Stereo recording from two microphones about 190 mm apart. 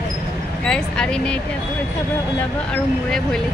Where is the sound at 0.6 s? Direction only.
5° left (ahead or behind).